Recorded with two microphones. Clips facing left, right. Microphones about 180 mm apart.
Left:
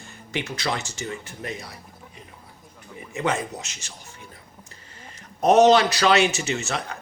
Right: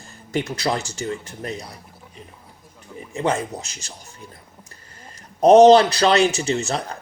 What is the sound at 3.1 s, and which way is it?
Speech, 30° right (ahead or behind).